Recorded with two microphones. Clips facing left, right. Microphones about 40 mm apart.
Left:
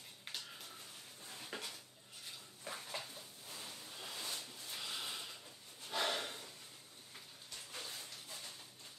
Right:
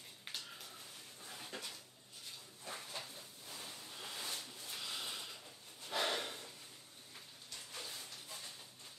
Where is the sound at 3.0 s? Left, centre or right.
Centre.